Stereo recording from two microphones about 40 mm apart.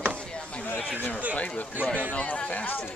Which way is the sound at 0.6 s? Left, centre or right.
Left.